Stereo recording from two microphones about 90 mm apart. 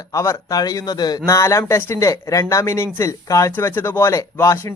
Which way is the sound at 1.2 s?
35° left (ahead or behind).